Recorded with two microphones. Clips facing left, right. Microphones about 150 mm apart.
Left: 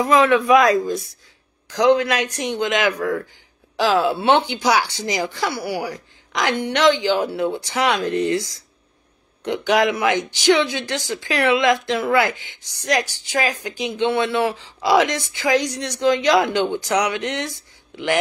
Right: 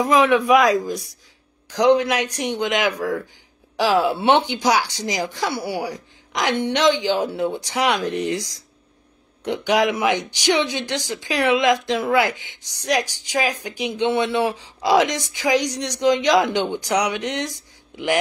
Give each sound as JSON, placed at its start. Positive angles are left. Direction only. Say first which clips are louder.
{"t": 0.0, "sound": "speech", "louder": "left 1 dB", "side_deg": -15}
{"t": 1.7, "sound": "speech", "louder": "even", "side_deg": -15}
{"t": 2.9, "sound": "a man's voice", "louder": "left 1 dB", "side_deg": 0}
{"t": 4.8, "sound": "a man's voice", "louder": "left 1 dB", "side_deg": 0}
{"t": 5.2, "sound": "speech", "louder": "right 2 dB", "side_deg": -15}